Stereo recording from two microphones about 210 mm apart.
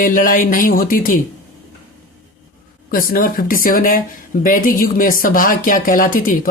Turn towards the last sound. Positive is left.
turn(degrees=40)  # may be behind; listen again after turning